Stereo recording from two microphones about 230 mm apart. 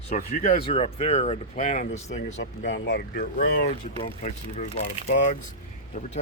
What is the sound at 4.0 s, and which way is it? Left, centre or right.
Speech, left.